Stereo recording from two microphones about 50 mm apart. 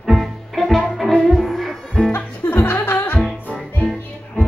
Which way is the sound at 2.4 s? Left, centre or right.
Left.